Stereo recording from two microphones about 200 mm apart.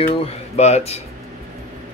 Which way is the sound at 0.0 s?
30° left (ahead or behind).